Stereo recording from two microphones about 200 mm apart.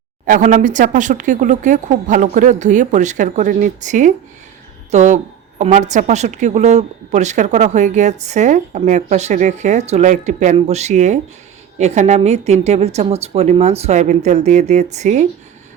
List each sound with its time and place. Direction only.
0.3 s a woman's voice: 40° right (ahead or behind)